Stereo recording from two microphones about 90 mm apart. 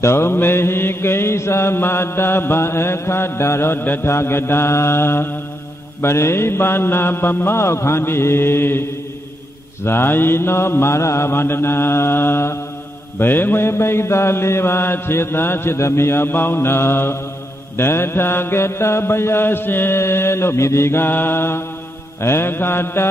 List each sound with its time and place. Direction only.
0.0 s mantra: 25° left (ahead or behind)
9.8 s mantra: 25° left (ahead or behind)